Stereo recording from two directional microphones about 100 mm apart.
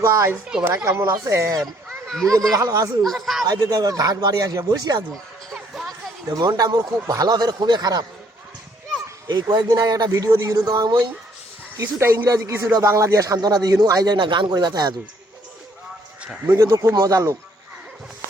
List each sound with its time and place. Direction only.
0.0 s speech: 30° right (ahead or behind)
1.5 s a child's voice: 5° left (ahead or behind)
2.5 s speech: 35° right (ahead or behind)
3.0 s speech: centre (ahead or behind)
3.4 s speech: 40° right (ahead or behind)
5.5 s music: centre (ahead or behind)
6.3 s speech: 45° right (ahead or behind)
9.2 s speech: 50° right (ahead or behind)
10.8 s speech: 45° right (ahead or behind)
11.8 s speech: 25° right (ahead or behind); by 14.9 s 45° right (ahead or behind)
16.5 s speech: 30° right (ahead or behind)